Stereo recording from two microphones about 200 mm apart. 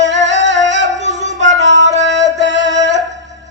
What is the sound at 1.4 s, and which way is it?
Music, 65° right (ahead or behind).